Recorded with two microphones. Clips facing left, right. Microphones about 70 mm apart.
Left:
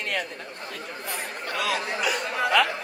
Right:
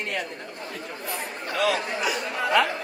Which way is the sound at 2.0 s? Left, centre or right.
Left.